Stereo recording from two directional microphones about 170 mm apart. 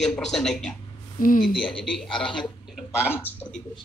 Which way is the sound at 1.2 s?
55° left (ahead or behind).